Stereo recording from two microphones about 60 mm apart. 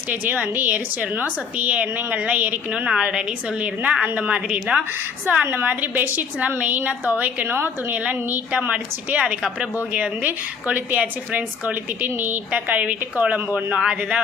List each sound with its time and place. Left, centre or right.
0.1 s a woman's voice: right
5.6 s a woman's voice: right
7.9 s a woman's voice: right
13.7 s a woman's voice: centre